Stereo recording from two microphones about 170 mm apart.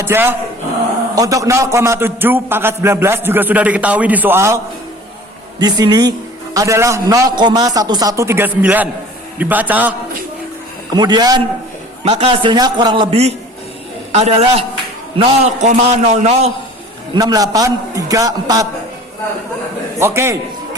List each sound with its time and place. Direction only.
0.0 s a man's voice: 15° right (ahead or behind)
10.9 s a man's voice: 25° right (ahead or behind)
12.0 s a man's voice: 35° right (ahead or behind)
17.2 s a man's voice: 20° right (ahead or behind)
20.0 s a man's voice: 15° right (ahead or behind)